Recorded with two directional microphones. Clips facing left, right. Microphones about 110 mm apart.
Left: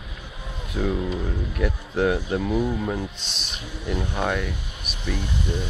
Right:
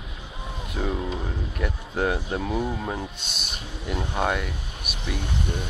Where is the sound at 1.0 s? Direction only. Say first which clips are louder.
Left 3 dB; 15° right (ahead or behind).